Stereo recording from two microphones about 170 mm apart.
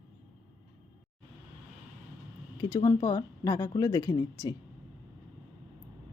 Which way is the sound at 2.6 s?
20° left (ahead or behind).